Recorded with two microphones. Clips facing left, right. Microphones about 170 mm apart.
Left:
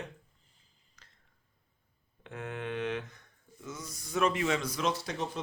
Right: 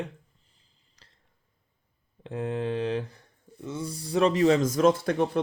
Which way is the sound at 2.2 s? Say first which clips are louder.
Right 9 dB; 30° right (ahead or behind).